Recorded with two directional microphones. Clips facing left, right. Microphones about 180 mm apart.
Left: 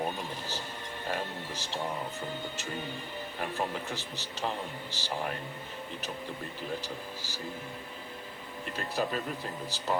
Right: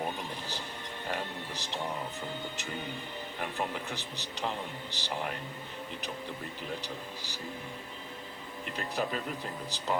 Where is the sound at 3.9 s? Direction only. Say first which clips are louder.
Left 1 dB; 15° right (ahead or behind).